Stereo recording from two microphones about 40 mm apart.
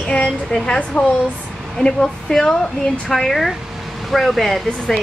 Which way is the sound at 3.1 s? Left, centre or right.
Centre.